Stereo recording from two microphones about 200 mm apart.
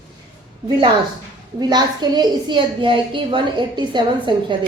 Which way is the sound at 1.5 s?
20° right (ahead or behind).